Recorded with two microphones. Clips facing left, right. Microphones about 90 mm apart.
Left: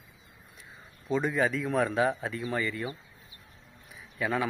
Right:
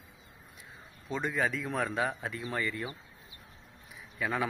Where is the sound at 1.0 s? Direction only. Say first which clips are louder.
Left 4 dB; centre (ahead or behind).